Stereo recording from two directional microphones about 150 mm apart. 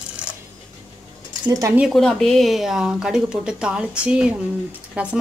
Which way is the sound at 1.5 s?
20° right (ahead or behind).